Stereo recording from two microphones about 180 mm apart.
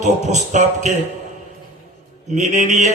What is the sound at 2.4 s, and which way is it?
Speech, 40° right (ahead or behind).